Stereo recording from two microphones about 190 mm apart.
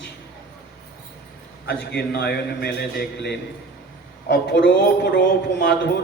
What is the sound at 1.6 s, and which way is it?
A man's voice, 60° left (ahead or behind).